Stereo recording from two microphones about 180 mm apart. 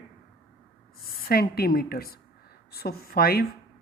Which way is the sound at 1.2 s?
60° left (ahead or behind).